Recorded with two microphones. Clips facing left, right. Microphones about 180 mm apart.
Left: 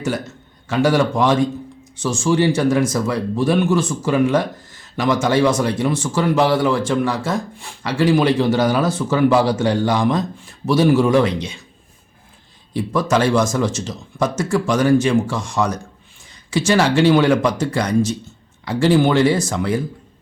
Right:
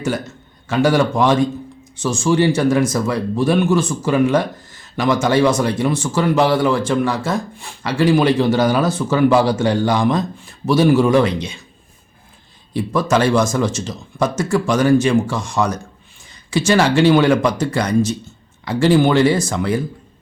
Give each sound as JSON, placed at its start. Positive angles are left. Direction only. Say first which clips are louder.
{"t": 0.7, "sound": "speech", "louder": "right 1 dB", "side_deg": -50}
{"t": 12.7, "sound": "speech", "louder": "right 1 dB", "side_deg": -60}